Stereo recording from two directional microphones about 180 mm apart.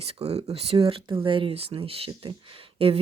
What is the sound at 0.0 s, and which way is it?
Speech, 35° right (ahead or behind).